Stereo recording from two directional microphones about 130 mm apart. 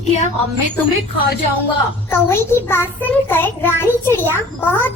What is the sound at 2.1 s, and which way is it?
A child's voice, 20° left (ahead or behind).